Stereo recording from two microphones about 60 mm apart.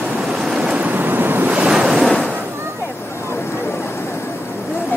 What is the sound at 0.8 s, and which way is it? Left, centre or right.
Waves, right.